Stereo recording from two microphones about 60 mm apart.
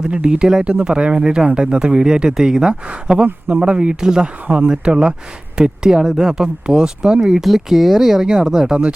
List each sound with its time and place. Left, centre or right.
0.0 s speech: centre